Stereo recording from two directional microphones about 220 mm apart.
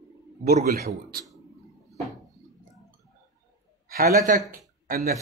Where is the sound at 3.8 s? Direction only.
40° right (ahead or behind).